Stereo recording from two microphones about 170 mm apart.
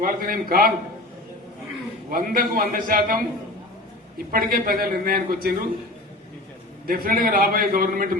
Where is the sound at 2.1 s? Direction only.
55° right (ahead or behind).